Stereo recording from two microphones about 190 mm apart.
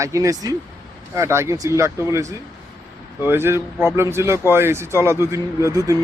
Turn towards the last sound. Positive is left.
turn(degrees=-15)  # may be behind; listen again after turning